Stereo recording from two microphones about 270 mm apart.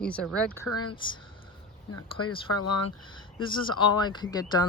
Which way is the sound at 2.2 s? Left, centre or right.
Centre.